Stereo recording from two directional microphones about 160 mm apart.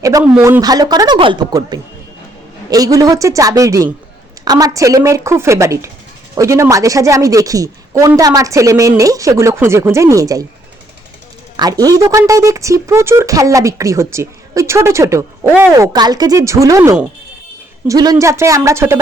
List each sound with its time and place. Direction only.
0.0 s speech: 20° right (ahead or behind)
0.3 s speech: 10° right (ahead or behind)
0.6 s speech: 25° right (ahead or behind)
11.5 s speech: 25° right (ahead or behind)
15.9 s speech: 25° right (ahead or behind)